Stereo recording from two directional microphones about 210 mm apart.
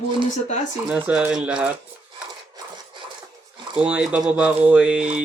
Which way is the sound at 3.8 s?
5° right (ahead or behind).